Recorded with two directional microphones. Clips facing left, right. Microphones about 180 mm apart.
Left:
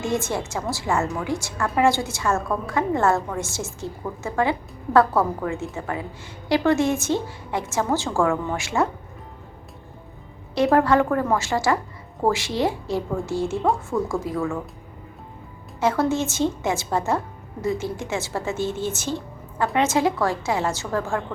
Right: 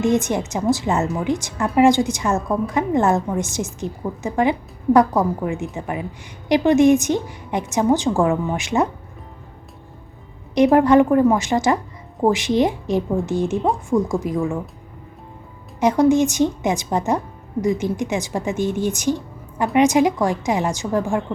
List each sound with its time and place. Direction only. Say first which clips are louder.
0.0 s a woman's voice: right 6 dB; 20° right (ahead or behind)
10.5 s a woman's voice: right 5 dB; 20° right (ahead or behind)
15.8 s speech: right 6 dB; 15° right (ahead or behind)